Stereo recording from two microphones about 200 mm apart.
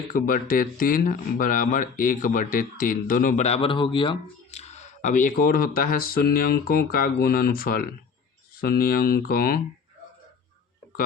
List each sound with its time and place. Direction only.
0.1 s speech: 45° left (ahead or behind)